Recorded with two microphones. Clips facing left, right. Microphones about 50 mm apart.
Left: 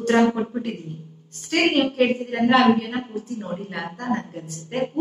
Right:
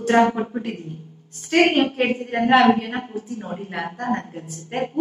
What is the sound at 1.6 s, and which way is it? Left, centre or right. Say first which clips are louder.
Speech: right 1 dB; right.